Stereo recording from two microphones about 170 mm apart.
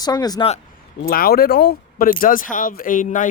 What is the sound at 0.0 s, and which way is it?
Speech, 25° left (ahead or behind).